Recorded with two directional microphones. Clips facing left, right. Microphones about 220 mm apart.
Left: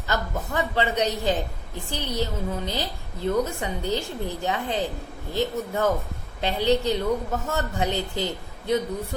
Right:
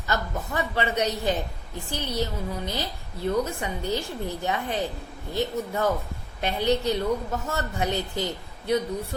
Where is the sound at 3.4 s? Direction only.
15° left (ahead or behind).